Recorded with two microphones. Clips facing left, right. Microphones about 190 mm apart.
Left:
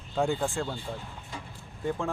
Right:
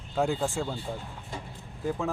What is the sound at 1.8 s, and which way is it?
Speech, 5° right (ahead or behind).